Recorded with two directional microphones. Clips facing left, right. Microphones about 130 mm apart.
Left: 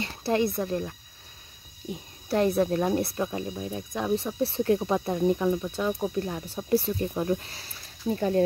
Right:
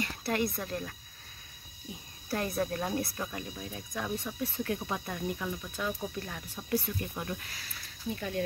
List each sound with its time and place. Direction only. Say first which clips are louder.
0.0 s speech: left 6 dB; 25° left (ahead or behind)